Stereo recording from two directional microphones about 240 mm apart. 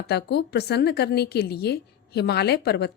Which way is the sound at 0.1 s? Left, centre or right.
Left.